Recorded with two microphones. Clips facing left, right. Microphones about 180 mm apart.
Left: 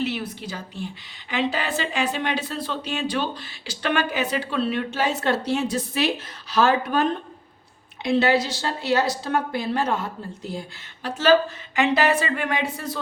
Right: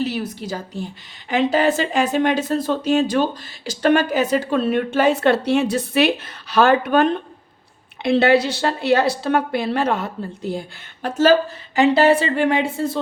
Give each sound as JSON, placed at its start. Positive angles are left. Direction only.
{"t": 0.0, "sound": "a woman's voice", "side_deg": -40}
{"t": 11.0, "sound": "speech", "side_deg": -45}
{"t": 11.8, "sound": "speech", "side_deg": -30}